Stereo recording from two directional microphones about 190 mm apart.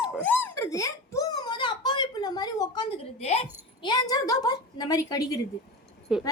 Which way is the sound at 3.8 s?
20° left (ahead or behind).